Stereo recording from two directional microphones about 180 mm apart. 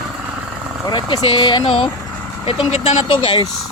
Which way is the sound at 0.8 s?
25° left (ahead or behind).